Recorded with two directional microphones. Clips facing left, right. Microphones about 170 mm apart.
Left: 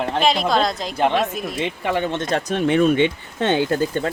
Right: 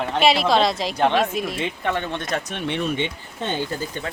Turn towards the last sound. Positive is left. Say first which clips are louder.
# left 7 dB
turn(degrees=75)  # may be behind; listen again after turning